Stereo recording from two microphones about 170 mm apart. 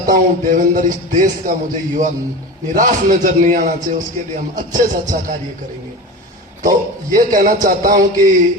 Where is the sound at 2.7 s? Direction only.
50° right (ahead or behind).